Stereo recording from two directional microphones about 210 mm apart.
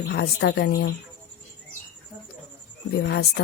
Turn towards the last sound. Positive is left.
turn(degrees=50)  # may be behind; listen again after turning